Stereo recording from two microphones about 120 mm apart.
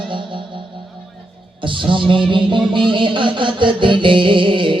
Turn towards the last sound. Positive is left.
turn(degrees=-45)  # may be behind; listen again after turning